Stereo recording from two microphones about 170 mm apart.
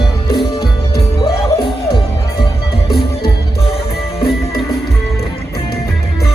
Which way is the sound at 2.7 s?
70° left (ahead or behind).